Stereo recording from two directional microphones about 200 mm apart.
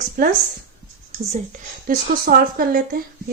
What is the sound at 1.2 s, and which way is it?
A woman's voice, 35° right (ahead or behind).